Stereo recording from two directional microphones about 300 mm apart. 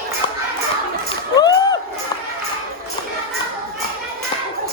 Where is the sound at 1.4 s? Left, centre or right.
Centre.